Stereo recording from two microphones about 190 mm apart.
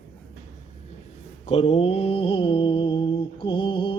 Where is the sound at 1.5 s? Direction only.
30° left (ahead or behind).